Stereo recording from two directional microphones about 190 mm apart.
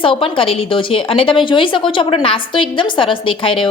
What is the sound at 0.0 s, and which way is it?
A woman's voice, 30° left (ahead or behind).